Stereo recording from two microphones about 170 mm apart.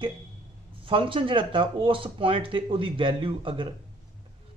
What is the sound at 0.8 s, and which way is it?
Speech, 30° right (ahead or behind).